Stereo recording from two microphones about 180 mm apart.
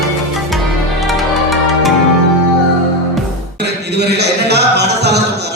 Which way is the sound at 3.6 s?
70° right (ahead or behind).